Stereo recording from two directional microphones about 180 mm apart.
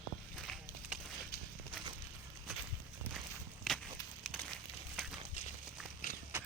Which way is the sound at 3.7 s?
Centre (ahead or behind).